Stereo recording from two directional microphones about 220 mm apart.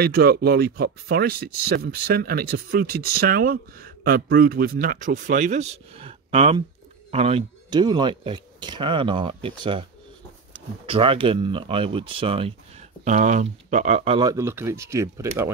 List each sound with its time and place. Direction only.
0.0 s speech: 45° right (ahead or behind); by 15.5 s 10° right (ahead or behind)